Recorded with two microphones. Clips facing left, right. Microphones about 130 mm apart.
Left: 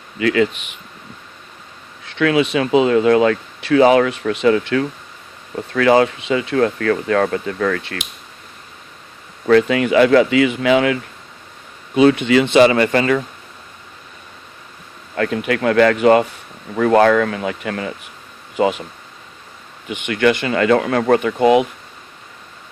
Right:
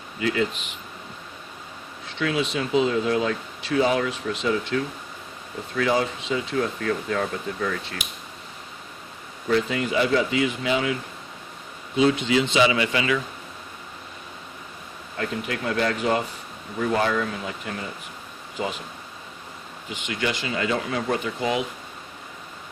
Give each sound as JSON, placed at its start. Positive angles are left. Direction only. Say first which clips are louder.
{"t": 0.2, "sound": "speech", "louder": "left 8 dB", "side_deg": 80}
{"t": 2.0, "sound": "speech", "louder": "left 9 dB", "side_deg": 70}
{"t": 9.5, "sound": "speech", "louder": "left 10 dB", "side_deg": 75}
{"t": 11.9, "sound": "speech", "louder": "left 8 dB", "side_deg": 65}
{"t": 15.1, "sound": "speech", "louder": "left 9 dB", "side_deg": 70}
{"t": 19.9, "sound": "speech", "louder": "left 11 dB", "side_deg": 60}